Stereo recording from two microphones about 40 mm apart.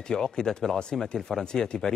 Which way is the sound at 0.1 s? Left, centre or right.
Centre.